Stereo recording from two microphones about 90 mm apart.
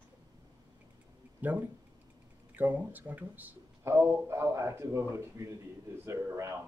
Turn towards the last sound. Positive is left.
turn(degrees=-35)  # may be behind; listen again after turning